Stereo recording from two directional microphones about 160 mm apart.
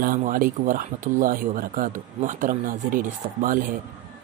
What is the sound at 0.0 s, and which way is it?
Speech, 60° right (ahead or behind).